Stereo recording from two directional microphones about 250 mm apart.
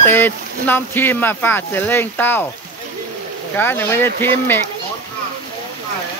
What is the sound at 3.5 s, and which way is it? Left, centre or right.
Speech, centre.